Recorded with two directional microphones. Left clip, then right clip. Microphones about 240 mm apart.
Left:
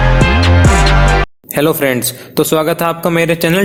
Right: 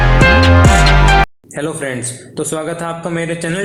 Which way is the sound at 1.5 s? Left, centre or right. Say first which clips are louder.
Left 8 dB; left.